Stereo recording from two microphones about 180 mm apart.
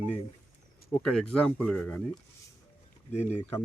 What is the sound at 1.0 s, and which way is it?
Speech, 5° left (ahead or behind).